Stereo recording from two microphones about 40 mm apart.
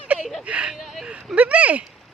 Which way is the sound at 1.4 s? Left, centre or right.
Right.